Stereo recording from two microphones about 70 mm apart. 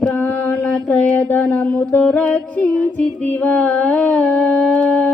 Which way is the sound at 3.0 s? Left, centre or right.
Left.